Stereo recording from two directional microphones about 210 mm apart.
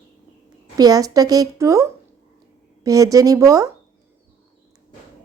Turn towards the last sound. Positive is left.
turn(degrees=-15)  # may be behind; listen again after turning